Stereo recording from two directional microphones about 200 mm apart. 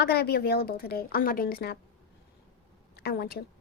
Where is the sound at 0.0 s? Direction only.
50° left (ahead or behind).